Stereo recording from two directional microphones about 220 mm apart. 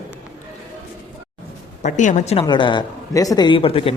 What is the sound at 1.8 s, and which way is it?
A woman's voice, 35° left (ahead or behind).